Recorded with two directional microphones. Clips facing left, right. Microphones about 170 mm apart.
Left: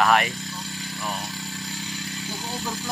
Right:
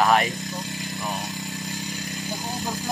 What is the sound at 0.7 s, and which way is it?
Motorcycle, 20° right (ahead or behind).